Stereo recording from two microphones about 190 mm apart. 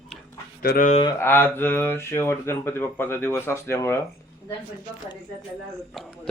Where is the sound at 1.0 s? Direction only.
10° left (ahead or behind).